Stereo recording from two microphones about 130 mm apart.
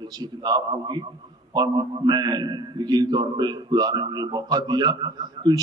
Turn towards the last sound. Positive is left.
turn(degrees=-30)  # may be behind; listen again after turning